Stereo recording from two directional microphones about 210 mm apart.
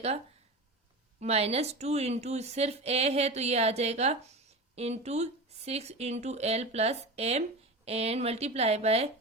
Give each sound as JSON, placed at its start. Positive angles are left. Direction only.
{"t": 1.2, "sound": "a woman's voice", "side_deg": -30}